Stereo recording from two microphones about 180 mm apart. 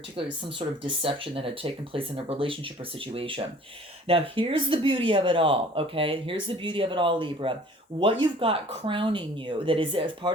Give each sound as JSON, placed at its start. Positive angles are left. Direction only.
{"t": 0.6, "sound": "speech", "side_deg": -30}